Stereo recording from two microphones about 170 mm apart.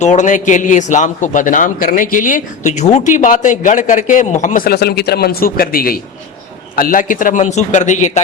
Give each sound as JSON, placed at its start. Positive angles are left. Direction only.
{"t": 0.0, "sound": "a man's voice", "side_deg": 45}